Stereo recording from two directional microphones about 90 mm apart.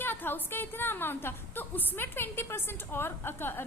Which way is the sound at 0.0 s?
25° left (ahead or behind).